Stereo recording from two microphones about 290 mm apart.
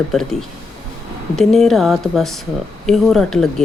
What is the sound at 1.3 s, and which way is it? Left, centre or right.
A woman's voice, centre.